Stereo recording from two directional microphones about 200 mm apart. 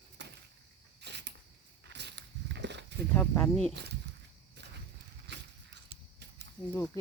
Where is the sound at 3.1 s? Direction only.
10° left (ahead or behind).